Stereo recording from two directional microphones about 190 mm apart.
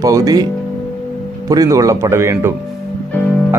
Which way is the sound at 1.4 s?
20° right (ahead or behind).